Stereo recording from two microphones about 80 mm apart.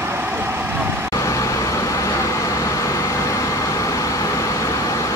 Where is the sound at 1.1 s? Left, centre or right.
Left.